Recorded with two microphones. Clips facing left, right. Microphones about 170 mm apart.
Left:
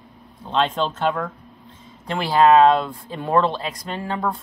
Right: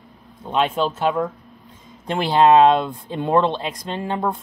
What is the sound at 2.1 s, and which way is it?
Speech, 20° right (ahead or behind).